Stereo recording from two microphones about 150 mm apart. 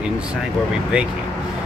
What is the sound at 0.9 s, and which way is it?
Speech, 5° right (ahead or behind).